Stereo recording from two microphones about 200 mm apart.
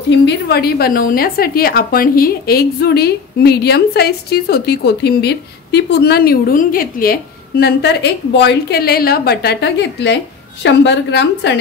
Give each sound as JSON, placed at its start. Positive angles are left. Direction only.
{"t": 0.1, "sound": "a woman's voice", "side_deg": 60}